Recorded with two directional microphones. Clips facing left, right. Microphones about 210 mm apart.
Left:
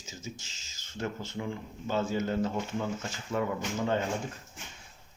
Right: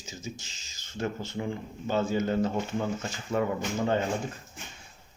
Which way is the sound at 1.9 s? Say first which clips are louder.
Right 3 dB; 15° right (ahead or behind).